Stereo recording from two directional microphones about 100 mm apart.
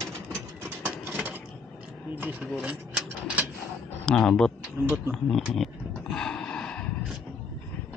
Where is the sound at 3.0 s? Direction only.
15° right (ahead or behind).